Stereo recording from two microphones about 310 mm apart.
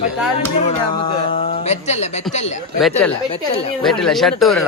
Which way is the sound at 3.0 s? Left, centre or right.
Centre.